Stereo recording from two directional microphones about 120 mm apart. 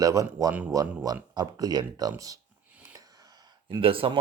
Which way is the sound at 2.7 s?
10° right (ahead or behind).